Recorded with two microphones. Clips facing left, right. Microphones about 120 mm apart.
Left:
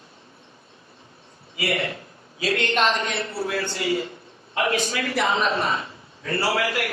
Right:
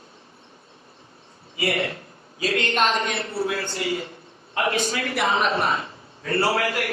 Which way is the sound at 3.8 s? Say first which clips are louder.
Left 3 dB; 50° left (ahead or behind).